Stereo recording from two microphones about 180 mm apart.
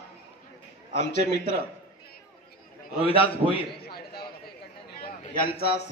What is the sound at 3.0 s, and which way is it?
Speech, 30° left (ahead or behind).